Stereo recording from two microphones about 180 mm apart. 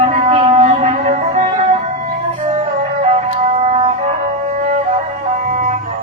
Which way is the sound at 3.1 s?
40° right (ahead or behind).